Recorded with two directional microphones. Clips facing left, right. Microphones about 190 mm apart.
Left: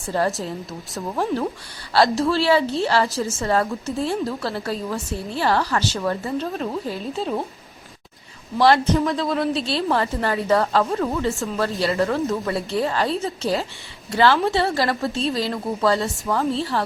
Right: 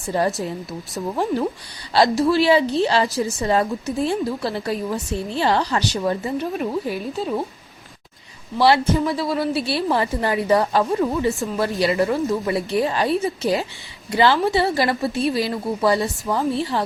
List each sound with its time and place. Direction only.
0.1 s a woman's voice: 15° right (ahead or behind)
8.5 s a woman's voice: 10° right (ahead or behind)